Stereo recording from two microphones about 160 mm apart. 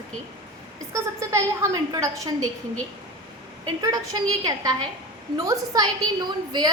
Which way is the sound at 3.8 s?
20° right (ahead or behind).